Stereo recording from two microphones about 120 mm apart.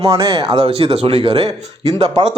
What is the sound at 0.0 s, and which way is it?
Speech, 50° right (ahead or behind).